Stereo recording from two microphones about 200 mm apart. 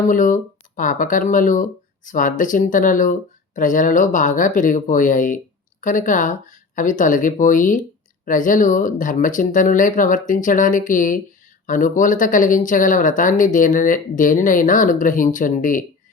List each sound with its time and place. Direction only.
0.1 s speech: 40° left (ahead or behind)